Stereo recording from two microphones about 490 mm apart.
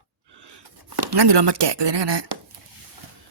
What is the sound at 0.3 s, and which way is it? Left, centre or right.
Chopping, right.